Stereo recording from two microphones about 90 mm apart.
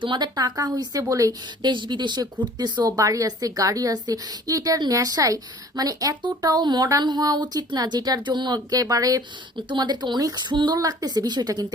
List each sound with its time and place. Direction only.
0.0 s speech: 60° right (ahead or behind); by 1.4 s 40° right (ahead or behind)
1.6 s a woman's voice: 60° right (ahead or behind); by 9.2 s 45° right (ahead or behind)
9.6 s speech: 55° right (ahead or behind)
10.8 s speech: 45° right (ahead or behind)